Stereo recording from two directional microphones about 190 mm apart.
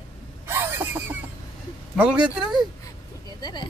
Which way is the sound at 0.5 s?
10° right (ahead or behind).